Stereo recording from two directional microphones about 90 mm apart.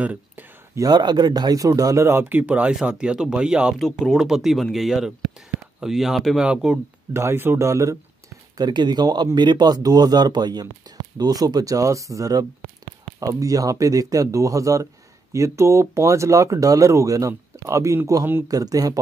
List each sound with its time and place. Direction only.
0.0 s a sound: 15° right (ahead or behind)
0.7 s speech: 50° right (ahead or behind)
2.0 s speech: 25° right (ahead or behind)
7.2 s speech: 25° right (ahead or behind)
8.5 s speech: 55° right (ahead or behind)